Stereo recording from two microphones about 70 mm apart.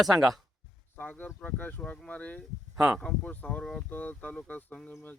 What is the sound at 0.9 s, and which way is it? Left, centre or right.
Speech, left.